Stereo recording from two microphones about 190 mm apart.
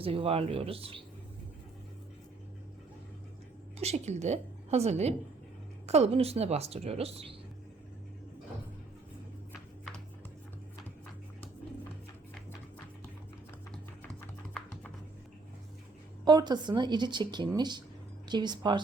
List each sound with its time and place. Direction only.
0.0 s speech: 30° right (ahead or behind)
3.8 s speech: 35° right (ahead or behind)
16.2 s speech: 20° right (ahead or behind)